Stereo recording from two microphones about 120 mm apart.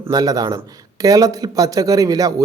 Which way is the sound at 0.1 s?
30° right (ahead or behind).